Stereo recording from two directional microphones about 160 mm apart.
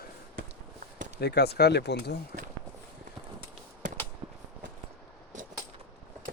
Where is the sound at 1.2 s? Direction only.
90° left.